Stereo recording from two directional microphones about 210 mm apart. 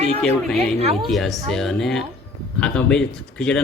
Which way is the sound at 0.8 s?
30° right (ahead or behind).